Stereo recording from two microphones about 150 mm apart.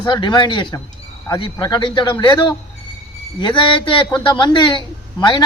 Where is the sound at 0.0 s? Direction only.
30° left (ahead or behind).